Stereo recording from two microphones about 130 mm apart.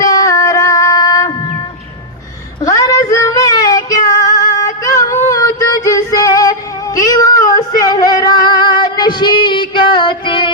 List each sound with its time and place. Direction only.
0.0 s music: 25° left (ahead or behind)
2.6 s female singing: 25° left (ahead or behind)